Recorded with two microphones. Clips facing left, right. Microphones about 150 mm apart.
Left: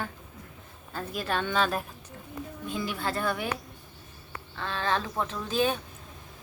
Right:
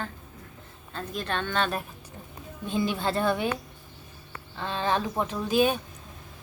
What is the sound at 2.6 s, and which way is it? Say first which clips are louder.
Speech: right 5 dB; 25° right (ahead or behind).